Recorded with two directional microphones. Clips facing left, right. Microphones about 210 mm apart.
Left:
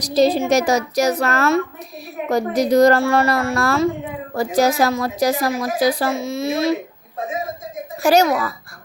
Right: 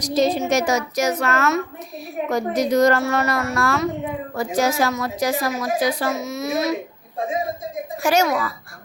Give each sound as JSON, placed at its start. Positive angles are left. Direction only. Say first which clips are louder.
{"t": 0.0, "sound": "a woman's voice", "louder": "left 3 dB", "side_deg": 35}
{"t": 8.0, "sound": "a woman's voice", "louder": "left 4 dB", "side_deg": 35}